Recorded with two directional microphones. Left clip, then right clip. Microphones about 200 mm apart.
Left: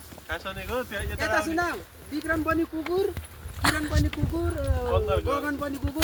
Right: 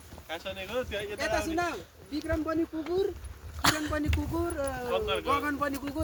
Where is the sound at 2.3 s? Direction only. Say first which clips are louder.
Left 5 dB; 20° left (ahead or behind).